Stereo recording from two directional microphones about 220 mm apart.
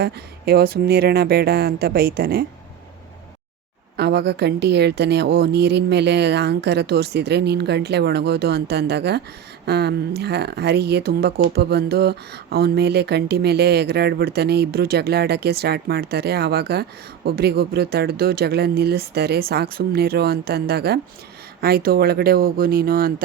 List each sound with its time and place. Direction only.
0.0 s speech: 45° right (ahead or behind)
3.9 s speech: 50° right (ahead or behind)